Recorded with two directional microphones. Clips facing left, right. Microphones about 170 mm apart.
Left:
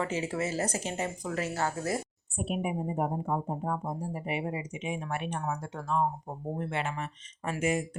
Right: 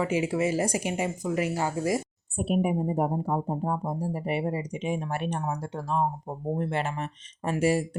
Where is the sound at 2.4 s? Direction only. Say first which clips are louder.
Right 6 dB; 35° right (ahead or behind).